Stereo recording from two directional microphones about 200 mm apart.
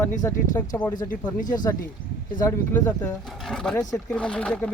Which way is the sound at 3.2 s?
Centre (ahead or behind).